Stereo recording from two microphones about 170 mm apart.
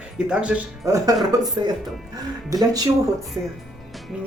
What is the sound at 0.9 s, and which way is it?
Speech, 20° right (ahead or behind).